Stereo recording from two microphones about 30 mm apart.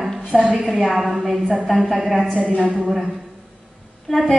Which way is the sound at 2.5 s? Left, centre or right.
Right.